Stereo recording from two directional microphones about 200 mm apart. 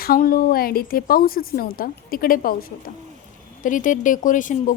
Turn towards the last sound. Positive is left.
turn(degrees=40)  # may be behind; listen again after turning